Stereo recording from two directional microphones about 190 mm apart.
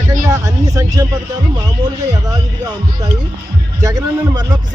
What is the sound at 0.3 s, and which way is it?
Vehicle, 15° right (ahead or behind).